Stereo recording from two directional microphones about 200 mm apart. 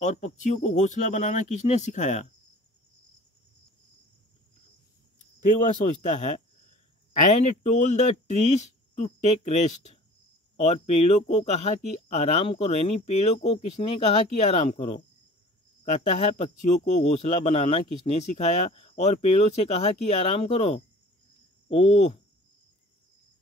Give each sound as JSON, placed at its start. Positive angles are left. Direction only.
{"t": 0.0, "sound": "speech", "side_deg": 35}
{"t": 5.6, "sound": "speech", "side_deg": 35}